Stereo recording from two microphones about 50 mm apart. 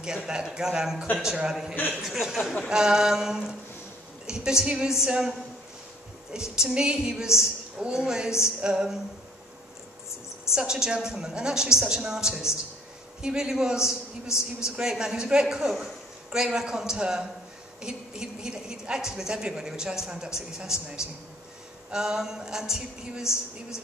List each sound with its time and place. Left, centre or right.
0.0 s a woman's voice: centre
2.0 s a sound: centre
2.7 s a woman's voice: centre
6.3 s a woman's voice: centre
10.5 s a woman's voice: centre